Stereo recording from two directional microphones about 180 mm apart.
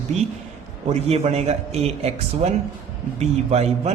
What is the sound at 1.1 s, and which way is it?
A woman's voice, 35° right (ahead or behind).